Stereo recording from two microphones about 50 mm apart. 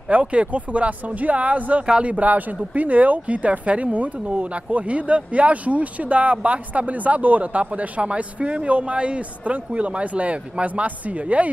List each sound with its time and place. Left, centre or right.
0.1 s a woman's voice: right
2.1 s a woman's voice: right